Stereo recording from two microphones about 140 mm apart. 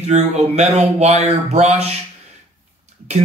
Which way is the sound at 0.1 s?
55° right (ahead or behind).